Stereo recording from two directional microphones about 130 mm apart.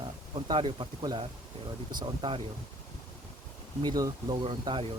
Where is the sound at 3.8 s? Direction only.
30° right (ahead or behind).